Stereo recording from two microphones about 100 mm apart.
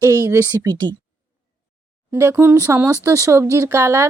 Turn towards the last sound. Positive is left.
turn(degrees=-25)  # may be behind; listen again after turning